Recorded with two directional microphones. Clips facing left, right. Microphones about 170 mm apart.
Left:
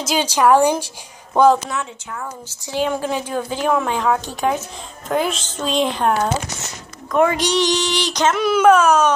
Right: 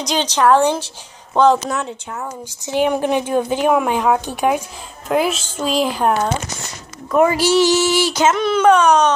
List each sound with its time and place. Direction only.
0.0 s a woman's voice: 10° left (ahead or behind)
2.1 s a woman's voice: 20° right (ahead or behind)
5.0 s speech: 5° right (ahead or behind)
8.4 s speech: 5° left (ahead or behind)